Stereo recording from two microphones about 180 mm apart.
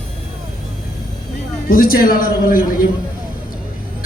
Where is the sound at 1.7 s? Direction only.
55° left (ahead or behind).